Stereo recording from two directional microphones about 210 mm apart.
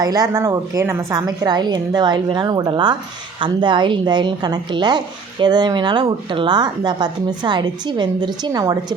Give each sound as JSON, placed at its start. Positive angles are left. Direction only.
{"t": 0.0, "sound": "speech", "side_deg": -20}